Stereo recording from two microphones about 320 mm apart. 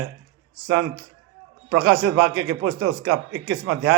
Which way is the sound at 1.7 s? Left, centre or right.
Right.